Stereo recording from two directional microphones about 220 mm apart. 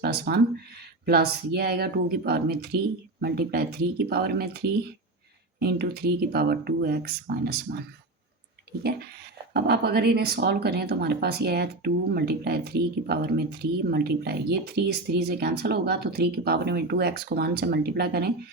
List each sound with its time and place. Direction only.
0.0 s speech: 45° right (ahead or behind)
5.5 s speech: 45° right (ahead or behind)
9.5 s speech: 45° right (ahead or behind)